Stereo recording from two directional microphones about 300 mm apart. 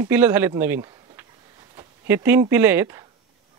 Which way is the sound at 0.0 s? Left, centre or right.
Centre.